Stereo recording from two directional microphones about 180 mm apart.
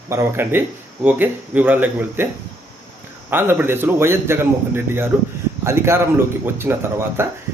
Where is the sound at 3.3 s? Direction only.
10° right (ahead or behind).